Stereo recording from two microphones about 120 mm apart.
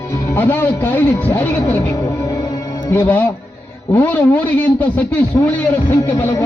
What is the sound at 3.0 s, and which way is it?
A man's voice, 15° left (ahead or behind).